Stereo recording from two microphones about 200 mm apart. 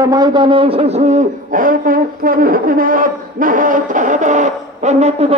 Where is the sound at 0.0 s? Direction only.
20° right (ahead or behind).